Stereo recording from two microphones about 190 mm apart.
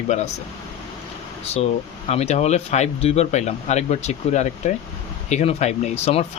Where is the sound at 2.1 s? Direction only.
35° left (ahead or behind).